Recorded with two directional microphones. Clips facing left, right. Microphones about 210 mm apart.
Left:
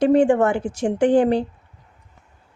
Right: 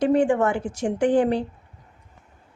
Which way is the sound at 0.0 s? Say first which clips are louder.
Left 4 dB; 30° left (ahead or behind).